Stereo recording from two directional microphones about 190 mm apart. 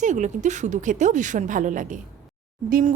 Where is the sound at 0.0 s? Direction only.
40° right (ahead or behind).